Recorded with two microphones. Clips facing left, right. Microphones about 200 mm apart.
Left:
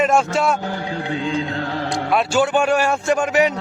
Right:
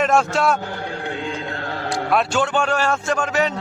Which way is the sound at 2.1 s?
Centre (ahead or behind).